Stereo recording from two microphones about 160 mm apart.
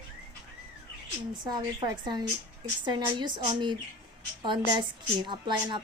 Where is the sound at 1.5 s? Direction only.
25° right (ahead or behind).